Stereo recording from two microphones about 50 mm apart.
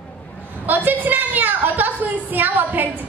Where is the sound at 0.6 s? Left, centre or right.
Right.